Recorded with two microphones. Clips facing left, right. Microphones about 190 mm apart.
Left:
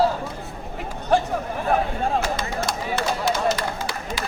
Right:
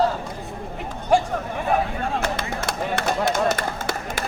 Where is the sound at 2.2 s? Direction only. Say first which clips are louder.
Left 1 dB; 60° right (ahead or behind).